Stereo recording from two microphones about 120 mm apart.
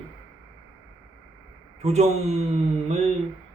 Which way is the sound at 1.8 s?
65° right (ahead or behind).